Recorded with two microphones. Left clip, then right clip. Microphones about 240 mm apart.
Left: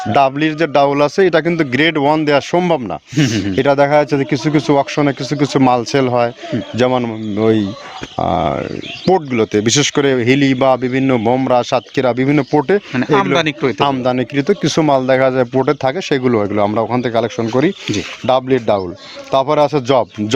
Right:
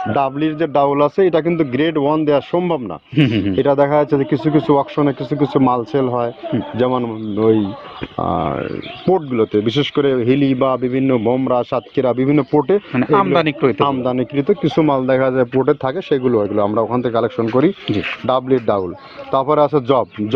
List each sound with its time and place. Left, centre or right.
0.1 s speech: left
3.2 s speech: left
3.5 s speech: left
12.9 s speech: left
13.7 s speech: left